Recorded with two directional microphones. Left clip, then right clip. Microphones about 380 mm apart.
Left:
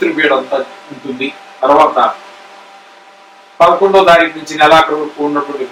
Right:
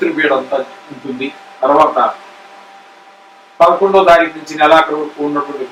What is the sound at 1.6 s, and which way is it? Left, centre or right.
Speech, centre.